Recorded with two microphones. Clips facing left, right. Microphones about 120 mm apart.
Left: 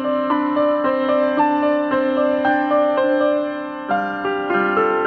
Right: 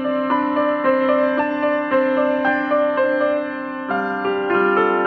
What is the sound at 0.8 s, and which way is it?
Music, 20° left (ahead or behind).